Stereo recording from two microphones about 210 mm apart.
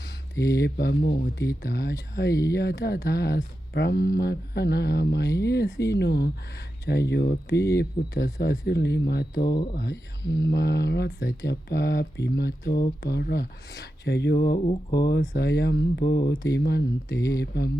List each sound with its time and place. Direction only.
0.5 s speech: 50° left (ahead or behind)
14.6 s speech: 30° left (ahead or behind)
14.9 s speech: 50° left (ahead or behind)